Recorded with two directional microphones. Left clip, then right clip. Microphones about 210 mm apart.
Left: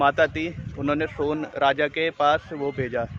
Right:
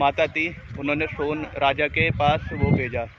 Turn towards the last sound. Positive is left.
turn(degrees=15)  # may be behind; listen again after turning